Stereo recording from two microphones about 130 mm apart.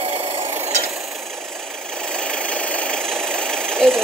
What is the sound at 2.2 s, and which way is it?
Vehicle, 10° left (ahead or behind).